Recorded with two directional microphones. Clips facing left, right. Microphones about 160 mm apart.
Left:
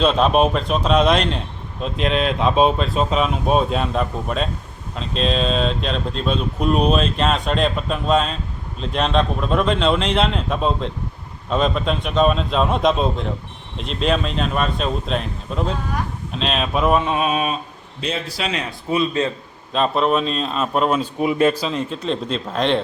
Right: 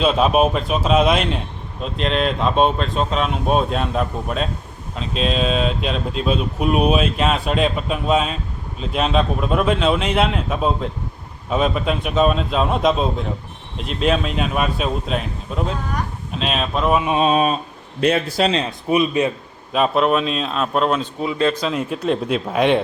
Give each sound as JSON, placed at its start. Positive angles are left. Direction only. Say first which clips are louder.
{"t": 0.0, "sound": "speech", "louder": "even", "side_deg": -5}
{"t": 17.2, "sound": "a sound", "louder": "right 4 dB", "side_deg": -35}
{"t": 18.0, "sound": "a man's voice", "louder": "right 8 dB", "side_deg": -55}
{"t": 18.9, "sound": "speech", "louder": "right 2 dB", "side_deg": -15}
{"t": 19.7, "sound": "speech", "louder": "right 1 dB", "side_deg": -5}
{"t": 21.5, "sound": "speech", "louder": "right 2 dB", "side_deg": 5}
{"t": 21.8, "sound": "speech", "louder": "right 3 dB", "side_deg": -10}